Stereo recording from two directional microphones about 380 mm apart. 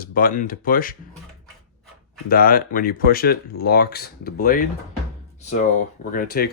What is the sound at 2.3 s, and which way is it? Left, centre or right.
Speech, left.